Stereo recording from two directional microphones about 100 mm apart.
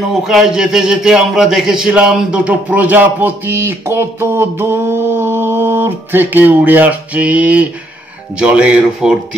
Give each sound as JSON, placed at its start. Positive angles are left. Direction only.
{"t": 0.1, "sound": "a man's voice", "side_deg": -5}